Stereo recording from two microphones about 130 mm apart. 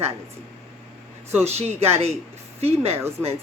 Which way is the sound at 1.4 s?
55° right (ahead or behind).